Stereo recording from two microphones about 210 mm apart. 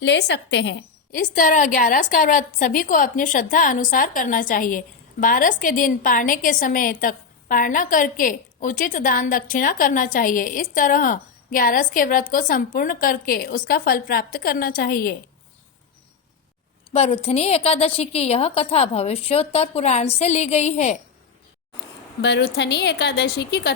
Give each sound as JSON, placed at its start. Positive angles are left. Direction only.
{"t": 0.0, "sound": "a woman's voice", "side_deg": 55}
{"t": 1.2, "sound": "a woman's voice", "side_deg": 40}
{"t": 16.9, "sound": "a woman's voice", "side_deg": 30}
{"t": 22.2, "sound": "a woman's voice", "side_deg": 55}